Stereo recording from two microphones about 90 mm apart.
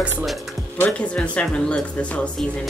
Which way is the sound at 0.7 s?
15° left (ahead or behind).